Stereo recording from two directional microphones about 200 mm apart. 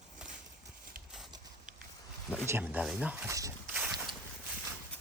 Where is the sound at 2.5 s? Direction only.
10° right (ahead or behind).